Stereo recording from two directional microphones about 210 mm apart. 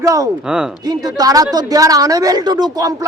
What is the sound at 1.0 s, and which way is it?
A man's voice, 20° right (ahead or behind).